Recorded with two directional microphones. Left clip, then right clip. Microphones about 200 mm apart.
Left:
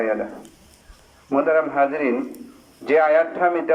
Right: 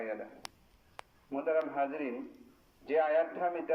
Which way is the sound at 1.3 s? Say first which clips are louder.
Left 14 dB; 15° right (ahead or behind).